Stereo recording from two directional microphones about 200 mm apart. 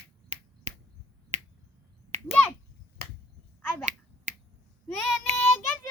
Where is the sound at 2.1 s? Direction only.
35° right (ahead or behind).